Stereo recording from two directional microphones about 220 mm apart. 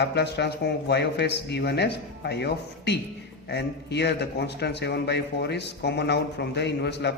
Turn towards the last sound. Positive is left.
turn(degrees=50)  # may be behind; listen again after turning